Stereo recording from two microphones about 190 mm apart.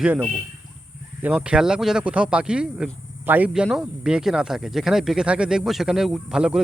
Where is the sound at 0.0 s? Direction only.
5° right (ahead or behind).